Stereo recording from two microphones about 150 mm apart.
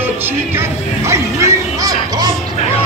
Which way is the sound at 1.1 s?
20° right (ahead or behind).